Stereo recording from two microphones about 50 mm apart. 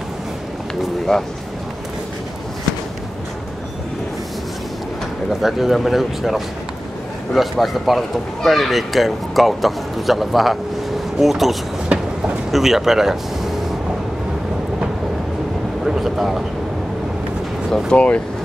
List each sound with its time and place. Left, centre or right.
1.1 s speech: centre
5.3 s speech: centre
15.8 s speech: centre
17.6 s speech: centre
17.9 s speech: left